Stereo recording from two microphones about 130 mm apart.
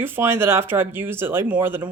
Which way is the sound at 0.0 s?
20° right (ahead or behind).